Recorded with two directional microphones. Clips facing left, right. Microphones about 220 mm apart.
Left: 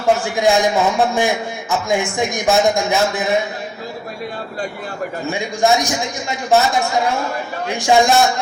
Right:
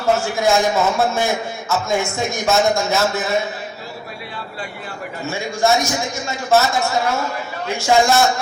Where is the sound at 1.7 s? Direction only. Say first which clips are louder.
Left 1 dB; 15° left (ahead or behind).